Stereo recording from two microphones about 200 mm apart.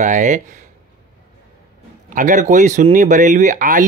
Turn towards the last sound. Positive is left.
turn(degrees=-40)  # may be behind; listen again after turning